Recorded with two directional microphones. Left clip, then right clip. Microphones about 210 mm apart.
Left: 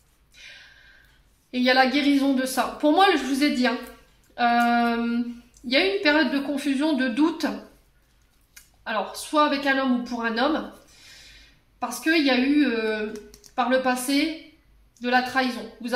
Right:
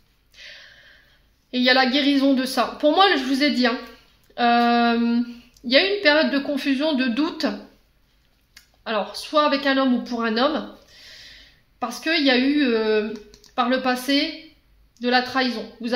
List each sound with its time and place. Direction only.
1.5 s a woman's voice: 45° right (ahead or behind)
8.8 s a woman's voice: 45° right (ahead or behind)
11.8 s a woman's voice: 45° right (ahead or behind)